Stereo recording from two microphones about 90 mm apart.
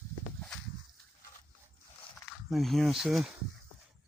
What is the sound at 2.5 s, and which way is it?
Speech, centre (ahead or behind).